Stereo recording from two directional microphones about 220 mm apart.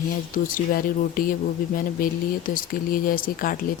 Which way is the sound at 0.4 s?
40° left (ahead or behind).